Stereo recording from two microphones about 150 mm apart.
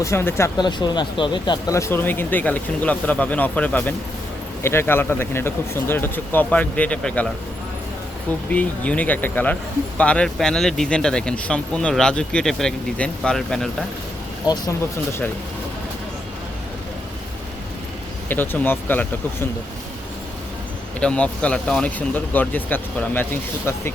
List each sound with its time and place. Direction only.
0.0 s speech: 15° left (ahead or behind)
0.6 s speech: 30° left (ahead or behind); by 7.3 s 10° left (ahead or behind)
8.4 s speech: 10° left (ahead or behind)
14.4 s speech: 25° left (ahead or behind)
18.3 s speech: 15° left (ahead or behind)
21.0 s speech: 5° left (ahead or behind)